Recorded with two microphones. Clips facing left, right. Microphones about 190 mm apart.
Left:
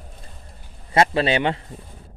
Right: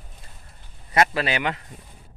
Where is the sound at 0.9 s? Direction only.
30° left (ahead or behind).